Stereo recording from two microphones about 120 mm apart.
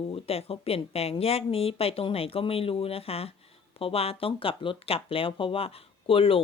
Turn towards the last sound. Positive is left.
turn(degrees=50)  # may be behind; listen again after turning